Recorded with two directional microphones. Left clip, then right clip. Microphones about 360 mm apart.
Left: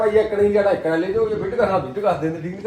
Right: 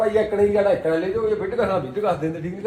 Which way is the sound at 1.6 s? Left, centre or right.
Centre.